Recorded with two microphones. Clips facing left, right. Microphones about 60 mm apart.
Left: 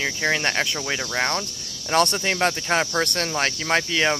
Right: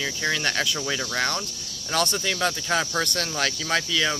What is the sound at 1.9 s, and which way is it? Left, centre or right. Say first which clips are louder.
Speech: left 5 dB; left.